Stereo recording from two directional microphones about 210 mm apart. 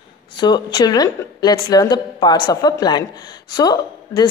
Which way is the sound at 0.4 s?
20° left (ahead or behind).